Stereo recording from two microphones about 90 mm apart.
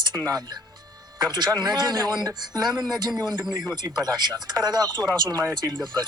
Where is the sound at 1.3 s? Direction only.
50° right (ahead or behind).